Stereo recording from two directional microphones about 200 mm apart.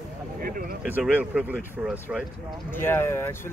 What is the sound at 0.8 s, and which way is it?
Speech, 10° right (ahead or behind).